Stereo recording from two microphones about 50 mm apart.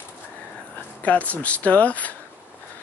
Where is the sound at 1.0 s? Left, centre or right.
Left.